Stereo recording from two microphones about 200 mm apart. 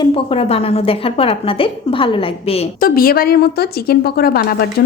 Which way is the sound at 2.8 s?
45° left (ahead or behind).